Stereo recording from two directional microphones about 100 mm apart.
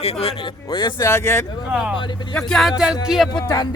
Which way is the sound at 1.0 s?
30° left (ahead or behind).